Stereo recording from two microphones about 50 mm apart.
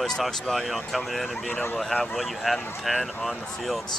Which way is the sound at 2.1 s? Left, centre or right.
Centre.